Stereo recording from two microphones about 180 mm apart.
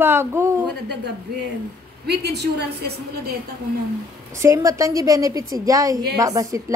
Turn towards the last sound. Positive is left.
turn(degrees=-20)  # may be behind; listen again after turning